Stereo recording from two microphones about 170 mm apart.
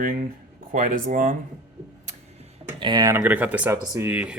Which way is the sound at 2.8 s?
25° right (ahead or behind).